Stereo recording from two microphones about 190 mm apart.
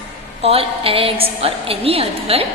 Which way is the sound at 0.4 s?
30° right (ahead or behind).